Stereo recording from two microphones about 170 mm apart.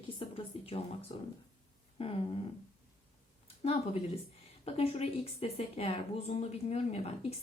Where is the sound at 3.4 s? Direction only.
35° left (ahead or behind).